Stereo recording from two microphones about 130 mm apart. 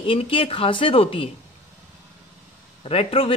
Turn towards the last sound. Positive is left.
turn(degrees=45)  # may be behind; listen again after turning